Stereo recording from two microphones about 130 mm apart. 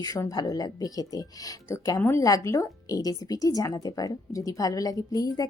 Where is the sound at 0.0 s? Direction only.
30° left (ahead or behind).